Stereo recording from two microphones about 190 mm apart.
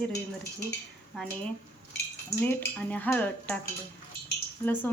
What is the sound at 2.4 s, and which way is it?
Speech, 10° left (ahead or behind).